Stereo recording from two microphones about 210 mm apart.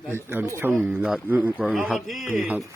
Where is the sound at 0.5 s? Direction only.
10° right (ahead or behind).